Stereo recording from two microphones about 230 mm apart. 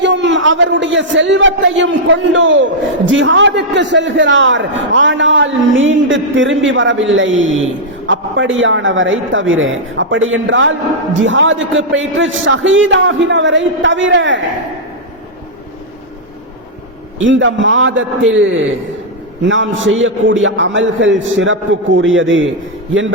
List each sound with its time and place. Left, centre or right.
0.0 s a man's voice: right
17.2 s a woman's voice: right